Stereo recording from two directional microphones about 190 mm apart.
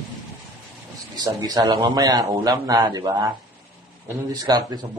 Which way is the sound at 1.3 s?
20° right (ahead or behind).